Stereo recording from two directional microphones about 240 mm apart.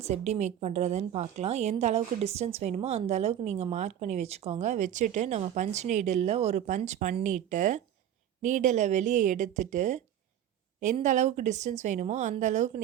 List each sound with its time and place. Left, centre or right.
0.0 s a woman's voice: right